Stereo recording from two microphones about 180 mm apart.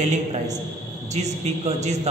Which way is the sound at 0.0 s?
40° right (ahead or behind).